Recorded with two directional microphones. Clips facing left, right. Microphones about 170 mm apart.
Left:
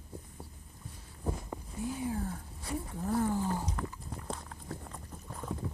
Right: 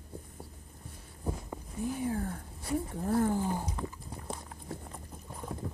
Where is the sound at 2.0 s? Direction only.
55° right (ahead or behind).